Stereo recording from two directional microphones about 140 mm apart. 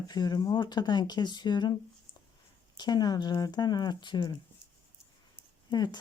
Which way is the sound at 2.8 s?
30° left (ahead or behind).